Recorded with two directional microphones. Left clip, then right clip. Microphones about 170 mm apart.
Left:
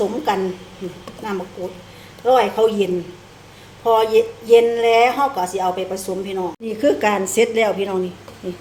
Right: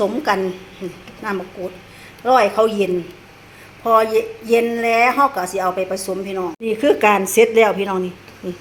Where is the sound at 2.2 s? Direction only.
20° right (ahead or behind).